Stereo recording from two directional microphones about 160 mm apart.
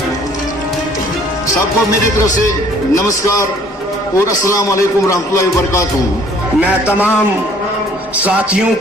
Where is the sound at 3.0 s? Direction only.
20° left (ahead or behind).